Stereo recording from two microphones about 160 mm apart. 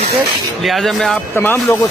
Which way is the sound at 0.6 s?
Centre (ahead or behind).